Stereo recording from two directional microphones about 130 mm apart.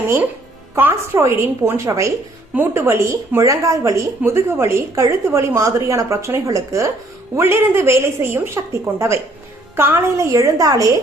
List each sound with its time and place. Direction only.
0.8 s a woman's voice: 20° right (ahead or behind)